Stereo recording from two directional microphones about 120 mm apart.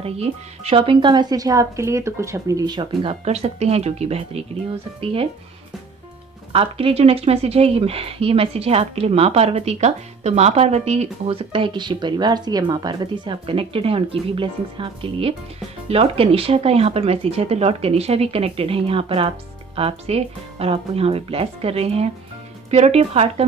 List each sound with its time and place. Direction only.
0.0 s speech: 55° right (ahead or behind)
3.3 s speech: 60° right (ahead or behind)
6.5 s speech: 55° right (ahead or behind)